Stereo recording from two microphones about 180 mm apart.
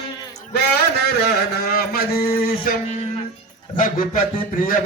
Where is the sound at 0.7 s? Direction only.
60° left (ahead or behind).